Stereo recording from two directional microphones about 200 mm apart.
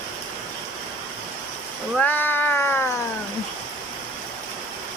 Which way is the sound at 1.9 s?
10° left (ahead or behind).